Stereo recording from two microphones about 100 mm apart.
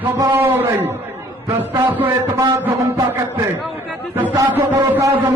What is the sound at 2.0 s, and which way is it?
Speech, 30° right (ahead or behind).